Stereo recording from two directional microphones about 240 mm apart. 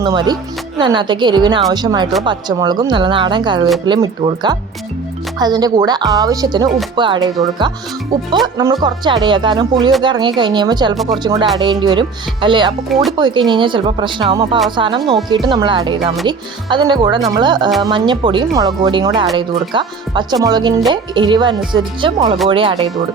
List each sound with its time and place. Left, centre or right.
0.0 s speech: centre
12.9 s speech: centre
13.1 s speech: centre